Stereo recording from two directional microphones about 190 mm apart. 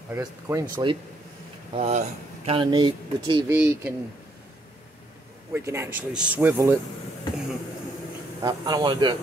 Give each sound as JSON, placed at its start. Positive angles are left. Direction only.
{"t": 0.1, "sound": "a man's voice", "side_deg": -15}
{"t": 1.7, "sound": "speech", "side_deg": -35}
{"t": 3.5, "sound": "a man's voice", "side_deg": -10}
{"t": 5.5, "sound": "a man's voice", "side_deg": -10}
{"t": 8.4, "sound": "speech", "side_deg": -20}